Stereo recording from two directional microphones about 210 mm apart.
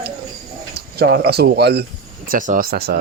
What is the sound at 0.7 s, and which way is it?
Speech, 50° right (ahead or behind).